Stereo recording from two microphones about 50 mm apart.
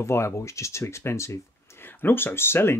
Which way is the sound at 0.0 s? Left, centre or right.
Left.